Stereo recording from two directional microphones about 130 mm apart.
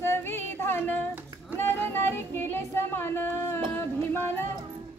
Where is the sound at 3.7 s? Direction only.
15° left (ahead or behind).